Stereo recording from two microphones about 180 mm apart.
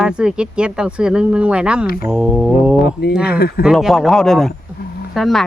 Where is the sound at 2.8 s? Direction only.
60° left (ahead or behind).